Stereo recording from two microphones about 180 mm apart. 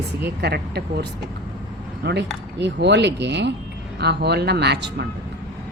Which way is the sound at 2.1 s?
70° right (ahead or behind).